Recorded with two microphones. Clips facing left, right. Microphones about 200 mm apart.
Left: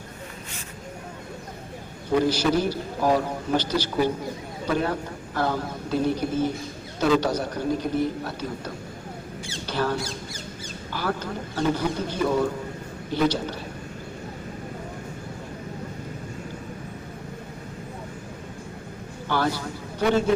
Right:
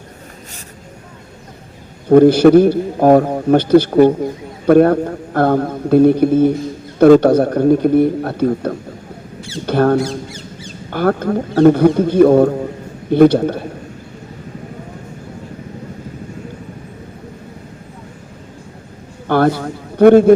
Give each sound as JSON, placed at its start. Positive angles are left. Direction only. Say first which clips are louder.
{"t": 2.0, "sound": "a man's voice", "louder": "right 14 dB", "side_deg": -55}
{"t": 19.3, "sound": "a man's voice", "louder": "right 11 dB", "side_deg": -55}